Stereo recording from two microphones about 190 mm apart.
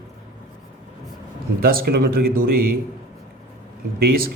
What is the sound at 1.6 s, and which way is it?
Speech, 50° right (ahead or behind).